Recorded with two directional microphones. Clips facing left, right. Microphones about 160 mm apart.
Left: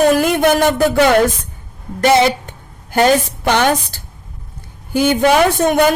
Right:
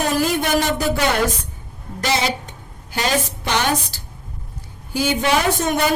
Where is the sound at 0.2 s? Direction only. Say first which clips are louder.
Left 6 dB; 55° left (ahead or behind).